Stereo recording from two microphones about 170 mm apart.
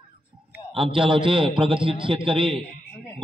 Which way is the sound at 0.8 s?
30° right (ahead or behind).